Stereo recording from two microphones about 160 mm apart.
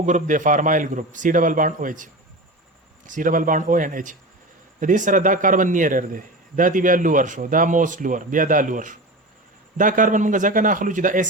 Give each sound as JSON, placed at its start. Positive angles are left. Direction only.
{"t": 0.0, "sound": "a man's voice", "side_deg": -50}
{"t": 3.1, "sound": "a man's voice", "side_deg": -55}